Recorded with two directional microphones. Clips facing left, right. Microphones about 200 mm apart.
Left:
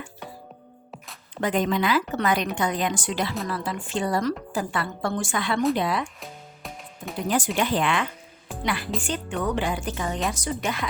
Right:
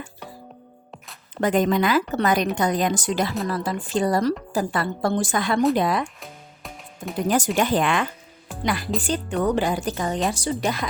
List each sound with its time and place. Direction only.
1.4 s a woman's voice: 45° right (ahead or behind)
6.1 s music: centre (ahead or behind)
7.3 s a woman's voice: 45° right (ahead or behind)